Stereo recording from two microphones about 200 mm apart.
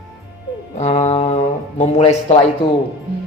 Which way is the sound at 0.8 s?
35° left (ahead or behind).